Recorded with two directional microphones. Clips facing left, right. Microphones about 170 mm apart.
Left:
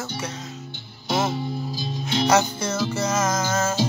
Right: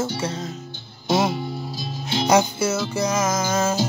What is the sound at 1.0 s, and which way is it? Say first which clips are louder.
Music: right 3 dB; 20° right (ahead or behind).